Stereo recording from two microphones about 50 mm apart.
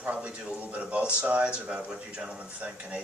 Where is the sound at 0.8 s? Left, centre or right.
Right.